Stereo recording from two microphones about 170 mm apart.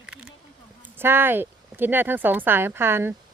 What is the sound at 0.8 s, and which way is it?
Speech, 15° right (ahead or behind).